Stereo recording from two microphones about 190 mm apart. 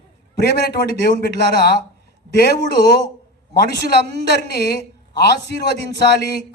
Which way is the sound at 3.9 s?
60° left (ahead or behind).